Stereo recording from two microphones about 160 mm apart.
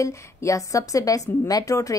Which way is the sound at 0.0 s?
20° left (ahead or behind).